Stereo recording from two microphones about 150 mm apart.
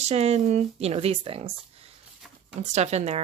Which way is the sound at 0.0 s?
45° right (ahead or behind).